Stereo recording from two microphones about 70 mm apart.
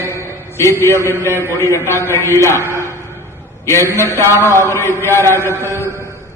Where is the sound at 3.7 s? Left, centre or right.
Left.